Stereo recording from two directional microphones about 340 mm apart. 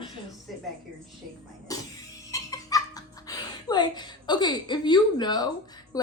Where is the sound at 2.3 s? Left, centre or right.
Centre.